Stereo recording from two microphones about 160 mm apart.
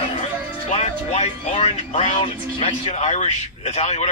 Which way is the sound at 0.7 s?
40° left (ahead or behind).